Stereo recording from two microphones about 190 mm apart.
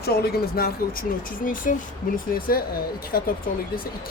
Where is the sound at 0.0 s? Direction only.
55° left (ahead or behind).